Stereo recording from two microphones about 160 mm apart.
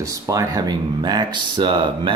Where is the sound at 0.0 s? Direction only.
20° right (ahead or behind).